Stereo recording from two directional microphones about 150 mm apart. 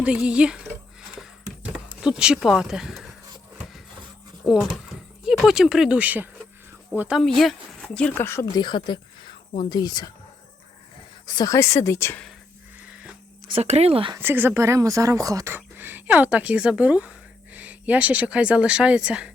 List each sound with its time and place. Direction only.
0.0 s speech: 5° right (ahead or behind)
1.2 s a sound: 5° right (ahead or behind)
4.4 s speech: 5° right (ahead or behind); by 8.4 s 15° left (ahead or behind)
8.5 s a woman's voice: 30° left (ahead or behind)
11.3 s a woman's voice: 25° left (ahead or behind)
13.5 s speech: 45° right (ahead or behind)
14.2 s speech: 15° right (ahead or behind)